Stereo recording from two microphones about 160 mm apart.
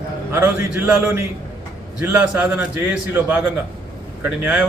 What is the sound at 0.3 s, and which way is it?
A man's voice, 10° right (ahead or behind).